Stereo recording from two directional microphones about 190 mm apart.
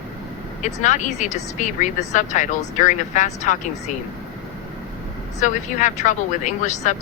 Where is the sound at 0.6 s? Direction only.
40° left (ahead or behind).